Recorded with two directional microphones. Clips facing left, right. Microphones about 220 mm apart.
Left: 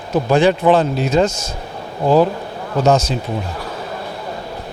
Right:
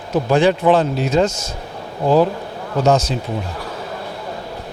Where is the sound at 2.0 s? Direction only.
40° left (ahead or behind).